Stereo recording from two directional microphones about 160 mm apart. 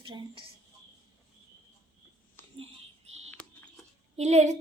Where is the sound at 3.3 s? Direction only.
5° left (ahead or behind).